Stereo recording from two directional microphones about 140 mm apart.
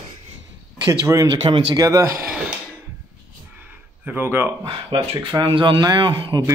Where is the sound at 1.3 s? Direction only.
35° right (ahead or behind).